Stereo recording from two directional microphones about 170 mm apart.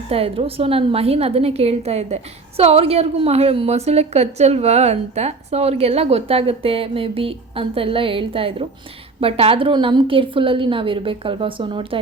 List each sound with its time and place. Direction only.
0.1 s a woman's voice: 35° right (ahead or behind)